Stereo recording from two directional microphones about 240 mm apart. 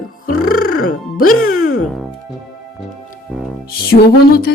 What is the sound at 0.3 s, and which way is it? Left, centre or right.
Music, left.